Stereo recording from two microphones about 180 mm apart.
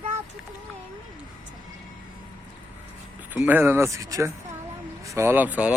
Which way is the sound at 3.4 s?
10° right (ahead or behind).